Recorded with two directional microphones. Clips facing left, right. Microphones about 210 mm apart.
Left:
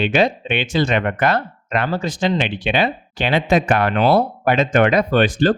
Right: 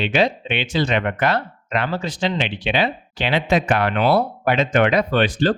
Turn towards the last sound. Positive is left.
turn(degrees=50)  # may be behind; listen again after turning